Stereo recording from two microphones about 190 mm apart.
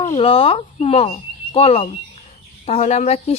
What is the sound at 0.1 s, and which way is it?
Speech, 30° left (ahead or behind).